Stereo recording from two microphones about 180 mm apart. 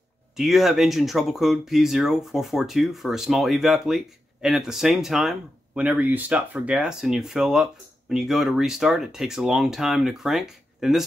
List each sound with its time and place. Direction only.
0.4 s speech: centre (ahead or behind)